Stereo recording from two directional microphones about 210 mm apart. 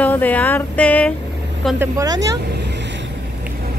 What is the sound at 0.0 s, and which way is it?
Speech, 10° left (ahead or behind).